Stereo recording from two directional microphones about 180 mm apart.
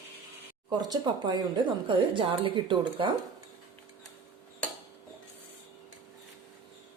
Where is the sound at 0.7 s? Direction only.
20° right (ahead or behind).